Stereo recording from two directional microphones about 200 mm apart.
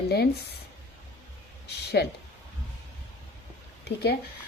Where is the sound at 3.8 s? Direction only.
55° left (ahead or behind).